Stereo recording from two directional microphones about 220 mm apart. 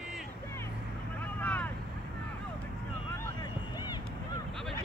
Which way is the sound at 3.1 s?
15° left (ahead or behind).